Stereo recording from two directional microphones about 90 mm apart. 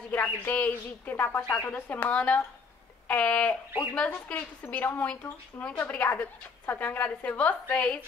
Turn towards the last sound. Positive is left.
turn(degrees=15)  # may be behind; listen again after turning